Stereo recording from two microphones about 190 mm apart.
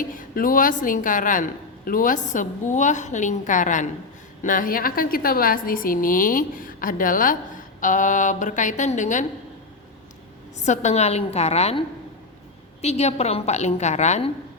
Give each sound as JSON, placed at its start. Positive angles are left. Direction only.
{"t": 0.0, "sound": "a woman's voice", "side_deg": 45}
{"t": 10.6, "sound": "a woman's voice", "side_deg": 40}
{"t": 12.8, "sound": "a woman's voice", "side_deg": 35}